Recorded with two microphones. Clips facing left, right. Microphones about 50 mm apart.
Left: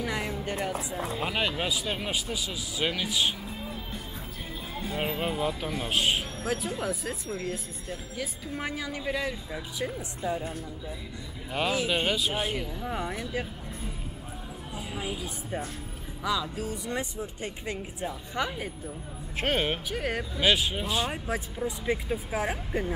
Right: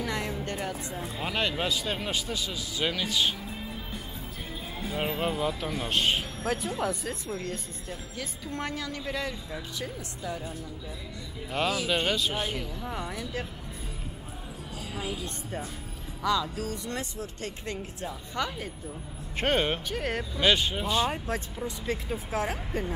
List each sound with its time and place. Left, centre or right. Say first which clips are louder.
0.0 s a sound: even; centre
1.1 s speech: even; centre
11.7 s speech: left 3 dB; centre
14.8 s a woman's voice: even; centre
19.3 s speech: right 1 dB; centre
21.6 s speech: left 4 dB; centre